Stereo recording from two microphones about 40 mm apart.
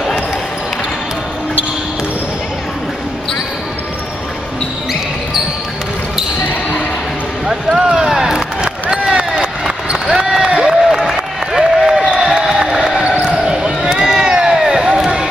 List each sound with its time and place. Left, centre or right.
7.7 s a sound: centre
8.1 s crowd: centre
8.9 s run: right; by 11.1 s centre
11.5 s applause: centre
12.2 s crowd: centre
13.2 s basketball bounce: centre
13.8 s a sound: centre